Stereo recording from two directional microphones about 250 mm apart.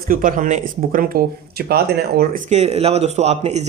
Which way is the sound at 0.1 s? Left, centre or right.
Right.